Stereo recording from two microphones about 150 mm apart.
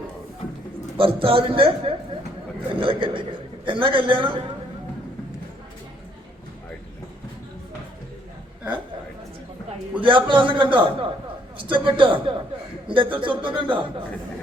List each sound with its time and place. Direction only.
0.9 s a man's voice: 35° right (ahead or behind)
10.0 s a man's voice: 35° right (ahead or behind)